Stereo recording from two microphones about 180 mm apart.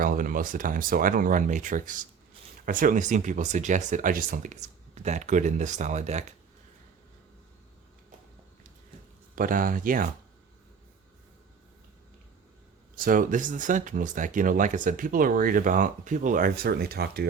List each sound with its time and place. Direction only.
0.0 s speech: 50° right (ahead or behind)
9.3 s speech: 50° right (ahead or behind)
13.0 s speech: 50° right (ahead or behind)